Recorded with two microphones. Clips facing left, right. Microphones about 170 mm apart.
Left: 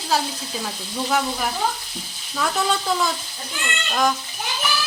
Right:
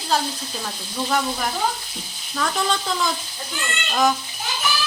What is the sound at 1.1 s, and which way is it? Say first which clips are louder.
A woman's voice: even; 5° left (ahead or behind).